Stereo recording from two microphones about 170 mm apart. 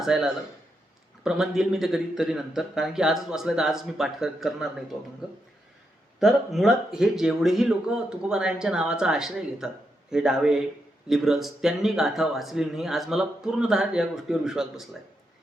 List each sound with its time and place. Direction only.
0.0 s a man's voice: centre (ahead or behind)